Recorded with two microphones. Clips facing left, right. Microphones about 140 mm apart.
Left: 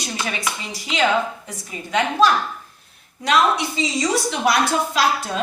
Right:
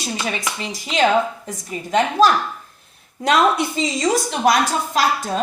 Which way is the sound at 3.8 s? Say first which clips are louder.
Right 1 dB; 45° right (ahead or behind).